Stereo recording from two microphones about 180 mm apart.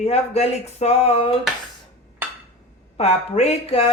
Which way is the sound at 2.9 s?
35° left (ahead or behind).